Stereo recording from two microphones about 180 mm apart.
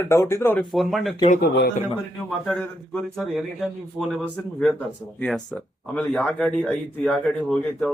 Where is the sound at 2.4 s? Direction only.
5° left (ahead or behind).